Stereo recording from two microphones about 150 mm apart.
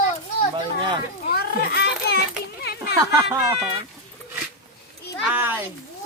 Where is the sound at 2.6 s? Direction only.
90° left.